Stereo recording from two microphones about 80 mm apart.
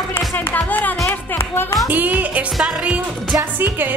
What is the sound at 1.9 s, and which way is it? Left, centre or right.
Music, right.